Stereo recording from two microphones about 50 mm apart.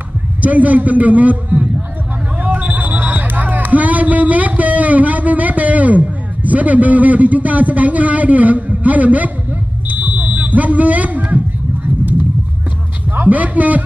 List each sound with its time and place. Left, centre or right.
0.4 s a man's voice: right
9.8 s smoke detector: right
13.1 s a man's voice: right